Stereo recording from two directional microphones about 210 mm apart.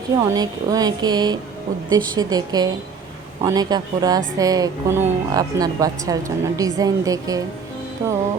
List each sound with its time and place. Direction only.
0.2 s speech: 20° right (ahead or behind)